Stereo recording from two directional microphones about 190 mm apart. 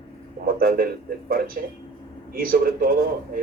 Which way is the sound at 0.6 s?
50° right (ahead or behind).